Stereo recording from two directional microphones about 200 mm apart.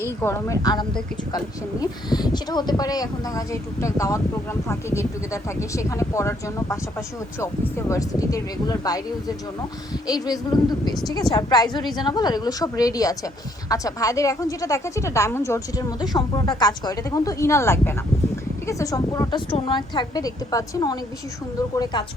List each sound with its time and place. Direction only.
0.2 s a woman's voice: 15° left (ahead or behind)